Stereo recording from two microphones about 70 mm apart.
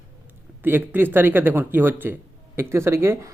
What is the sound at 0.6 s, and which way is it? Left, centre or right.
A man's voice, right.